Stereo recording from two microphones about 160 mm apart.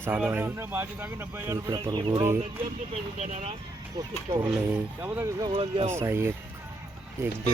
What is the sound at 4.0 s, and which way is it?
Speech, 25° right (ahead or behind).